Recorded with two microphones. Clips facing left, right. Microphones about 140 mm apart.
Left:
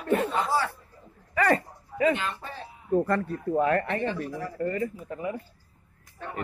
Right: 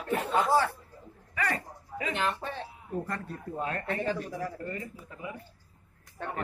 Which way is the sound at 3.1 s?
65° left (ahead or behind).